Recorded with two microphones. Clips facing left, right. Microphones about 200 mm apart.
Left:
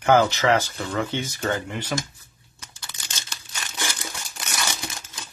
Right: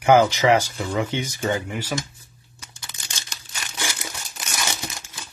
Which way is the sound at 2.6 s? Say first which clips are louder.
Even; 15° right (ahead or behind).